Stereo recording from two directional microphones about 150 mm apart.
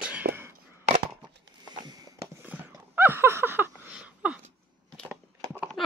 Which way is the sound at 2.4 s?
15° right (ahead or behind).